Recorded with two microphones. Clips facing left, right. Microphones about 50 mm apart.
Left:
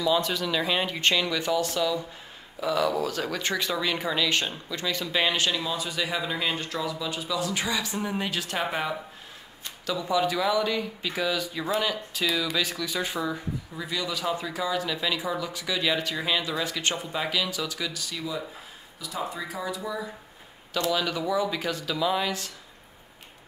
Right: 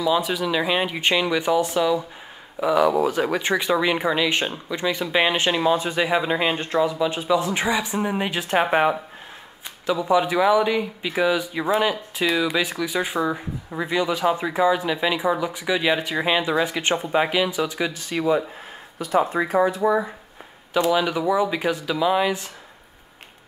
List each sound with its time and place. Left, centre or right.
0.0 s speech: centre; by 8.9 s right
9.8 s speech: right
13.7 s speech: right
20.7 s speech: centre